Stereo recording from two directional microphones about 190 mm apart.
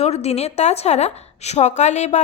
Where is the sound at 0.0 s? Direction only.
35° left (ahead or behind).